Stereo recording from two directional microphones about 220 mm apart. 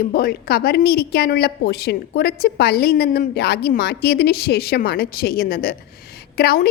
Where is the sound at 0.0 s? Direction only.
45° left (ahead or behind).